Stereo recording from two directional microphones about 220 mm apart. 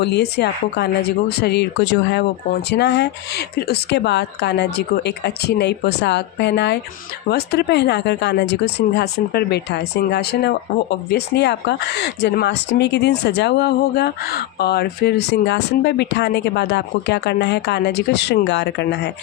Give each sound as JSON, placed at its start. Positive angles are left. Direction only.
{"t": 0.0, "sound": "speech", "side_deg": 50}